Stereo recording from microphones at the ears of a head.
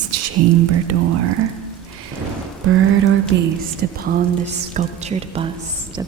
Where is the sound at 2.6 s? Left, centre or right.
Right.